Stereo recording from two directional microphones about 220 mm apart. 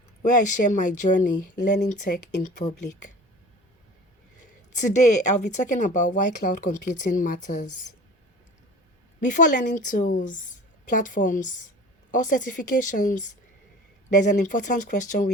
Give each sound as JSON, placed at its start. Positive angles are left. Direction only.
{"t": 0.2, "sound": "speech", "side_deg": 35}
{"t": 5.2, "sound": "speech", "side_deg": 35}
{"t": 9.2, "sound": "speech", "side_deg": 35}